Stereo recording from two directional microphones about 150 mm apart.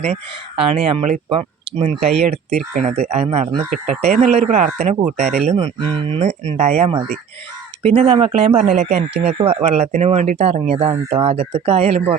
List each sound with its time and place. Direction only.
0.0 s speech: 40° right (ahead or behind)
3.7 s speech: 55° right (ahead or behind)
5.5 s speech: 35° right (ahead or behind)
6.2 s speech: 50° right (ahead or behind)